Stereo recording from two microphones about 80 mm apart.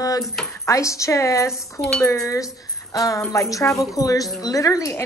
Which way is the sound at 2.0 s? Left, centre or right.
Left.